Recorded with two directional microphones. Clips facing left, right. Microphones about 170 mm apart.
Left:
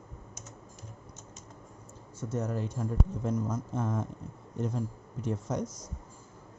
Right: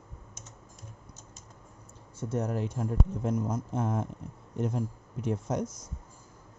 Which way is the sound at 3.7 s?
60° right (ahead or behind).